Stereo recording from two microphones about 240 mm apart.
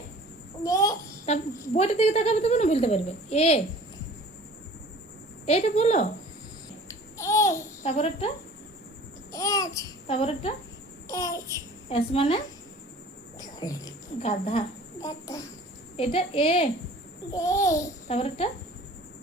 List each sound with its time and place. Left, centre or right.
0.6 s babbling: centre
1.3 s speech: left
5.5 s speech: left
6.8 s babbling: centre
7.8 s speech: left
9.3 s a child's voice: centre
10.2 s speech: left
11.1 s babbling: centre
11.9 s speech: left
13.4 s a sound: centre
16.0 s speech: left
17.3 s babbling: centre
18.1 s speech: left